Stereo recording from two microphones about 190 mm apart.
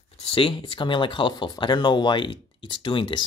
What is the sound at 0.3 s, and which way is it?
Speech, 25° left (ahead or behind).